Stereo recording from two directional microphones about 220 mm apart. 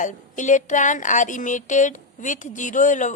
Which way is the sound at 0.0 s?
35° left (ahead or behind).